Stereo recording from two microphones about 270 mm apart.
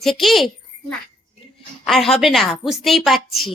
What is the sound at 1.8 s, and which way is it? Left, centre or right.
Speech, centre.